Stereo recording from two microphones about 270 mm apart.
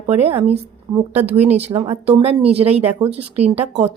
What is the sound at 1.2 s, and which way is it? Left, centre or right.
Speech, centre.